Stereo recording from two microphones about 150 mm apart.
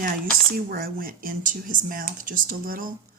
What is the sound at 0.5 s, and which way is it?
Speech, 80° right.